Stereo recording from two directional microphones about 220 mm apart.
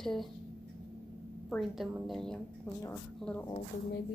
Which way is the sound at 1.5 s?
Centre (ahead or behind).